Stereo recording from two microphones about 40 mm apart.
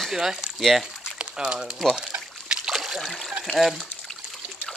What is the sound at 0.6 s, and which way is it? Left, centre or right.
Speech, centre.